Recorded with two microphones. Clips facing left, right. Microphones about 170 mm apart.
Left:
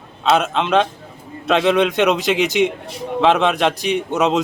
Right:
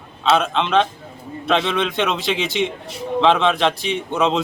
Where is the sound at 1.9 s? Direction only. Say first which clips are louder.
Left 5 dB; 45° left (ahead or behind).